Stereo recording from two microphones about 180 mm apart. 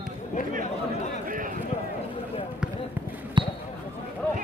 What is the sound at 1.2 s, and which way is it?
Run, 50° right (ahead or behind).